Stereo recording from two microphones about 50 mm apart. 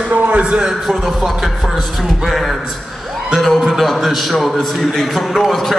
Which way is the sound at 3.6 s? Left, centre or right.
Centre.